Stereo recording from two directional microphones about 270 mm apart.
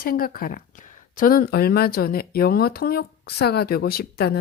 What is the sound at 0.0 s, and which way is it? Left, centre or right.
Speech, left.